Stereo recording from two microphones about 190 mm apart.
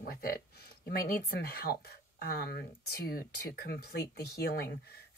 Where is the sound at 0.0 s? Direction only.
50° left (ahead or behind).